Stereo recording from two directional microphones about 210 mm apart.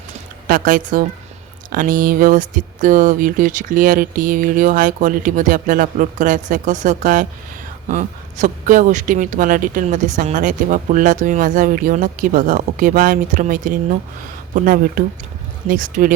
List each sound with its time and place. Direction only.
0.4 s speech: 40° right (ahead or behind)